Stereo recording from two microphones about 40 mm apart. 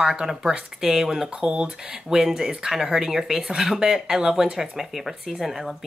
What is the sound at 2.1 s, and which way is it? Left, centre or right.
Speech, centre.